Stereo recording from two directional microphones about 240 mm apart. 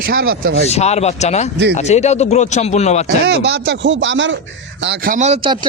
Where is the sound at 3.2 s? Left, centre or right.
Right.